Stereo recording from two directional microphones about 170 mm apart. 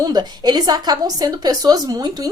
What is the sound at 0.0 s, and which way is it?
Speech, 25° right (ahead or behind).